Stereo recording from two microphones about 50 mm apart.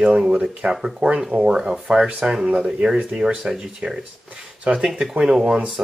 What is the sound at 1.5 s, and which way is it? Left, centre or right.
Speech, centre.